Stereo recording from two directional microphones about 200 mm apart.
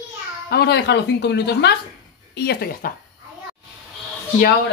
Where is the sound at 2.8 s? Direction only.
45° left (ahead or behind).